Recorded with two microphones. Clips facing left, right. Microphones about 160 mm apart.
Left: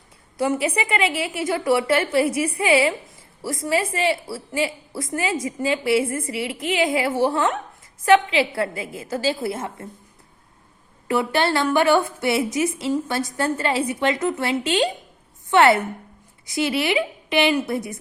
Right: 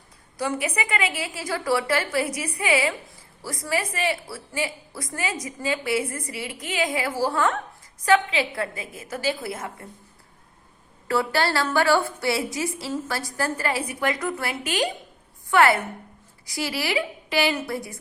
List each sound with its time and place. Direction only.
0.3 s a woman's voice: 25° left (ahead or behind)
11.1 s a woman's voice: 20° left (ahead or behind)